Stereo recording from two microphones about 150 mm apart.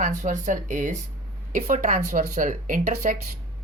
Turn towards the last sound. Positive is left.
turn(degrees=-55)  # may be behind; listen again after turning